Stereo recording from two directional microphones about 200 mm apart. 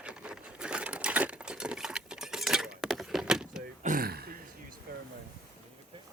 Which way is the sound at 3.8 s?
45° right (ahead or behind).